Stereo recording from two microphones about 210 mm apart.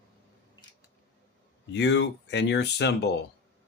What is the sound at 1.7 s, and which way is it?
Speech, 55° left (ahead or behind).